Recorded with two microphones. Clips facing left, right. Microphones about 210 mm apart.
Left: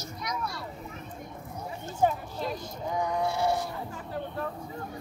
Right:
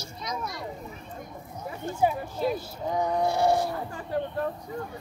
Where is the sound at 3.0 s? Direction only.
40° right (ahead or behind).